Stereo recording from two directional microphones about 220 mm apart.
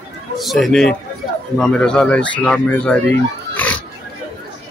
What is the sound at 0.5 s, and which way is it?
Speech, centre (ahead or behind).